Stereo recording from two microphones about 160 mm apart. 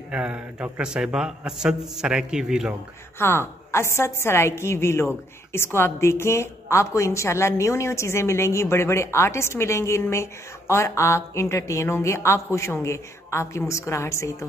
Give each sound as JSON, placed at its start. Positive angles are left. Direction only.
{"t": 0.1, "sound": "a man's voice", "side_deg": -10}
{"t": 3.2, "sound": "a woman's voice", "side_deg": 15}